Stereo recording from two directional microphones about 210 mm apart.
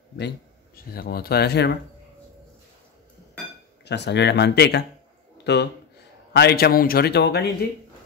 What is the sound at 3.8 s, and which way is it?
A man's voice, 55° left (ahead or behind).